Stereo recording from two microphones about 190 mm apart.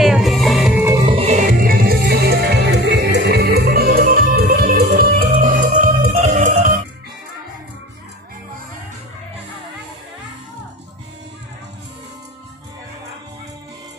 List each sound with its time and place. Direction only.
0.0 s music: centre (ahead or behind)
1.0 s music: 30° right (ahead or behind)